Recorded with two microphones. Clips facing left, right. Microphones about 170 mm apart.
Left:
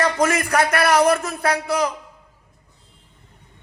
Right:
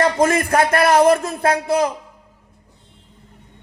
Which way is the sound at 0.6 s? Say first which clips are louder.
Right 3 dB; 50° right (ahead or behind).